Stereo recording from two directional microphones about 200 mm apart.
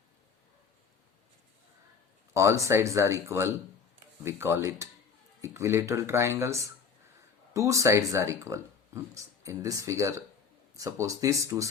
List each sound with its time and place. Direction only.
2.3 s speech: 15° right (ahead or behind)